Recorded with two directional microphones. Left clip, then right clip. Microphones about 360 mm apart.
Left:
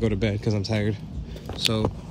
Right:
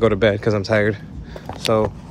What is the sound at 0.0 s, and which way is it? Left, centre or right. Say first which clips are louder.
Speech: right 11 dB; right.